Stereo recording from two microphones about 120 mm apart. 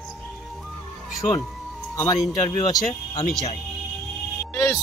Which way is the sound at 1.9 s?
25° left (ahead or behind).